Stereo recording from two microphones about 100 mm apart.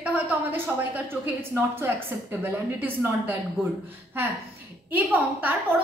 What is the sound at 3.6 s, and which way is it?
Speech, 5° left (ahead or behind).